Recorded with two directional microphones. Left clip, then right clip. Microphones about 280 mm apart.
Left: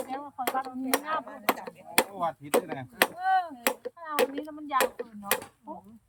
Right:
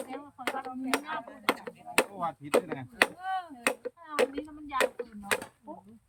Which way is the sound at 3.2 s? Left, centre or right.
Centre.